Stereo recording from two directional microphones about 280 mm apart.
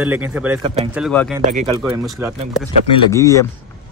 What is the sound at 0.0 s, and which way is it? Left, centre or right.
Speech, centre.